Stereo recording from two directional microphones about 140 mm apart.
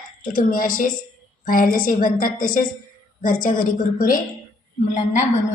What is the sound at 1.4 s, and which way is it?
A woman's voice, 90° left.